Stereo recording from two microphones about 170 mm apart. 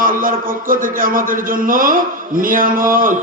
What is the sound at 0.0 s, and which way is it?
A man's voice, 55° right (ahead or behind).